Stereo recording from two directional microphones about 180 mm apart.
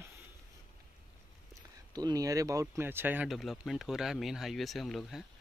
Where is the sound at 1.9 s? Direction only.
20° right (ahead or behind); by 5.2 s centre (ahead or behind).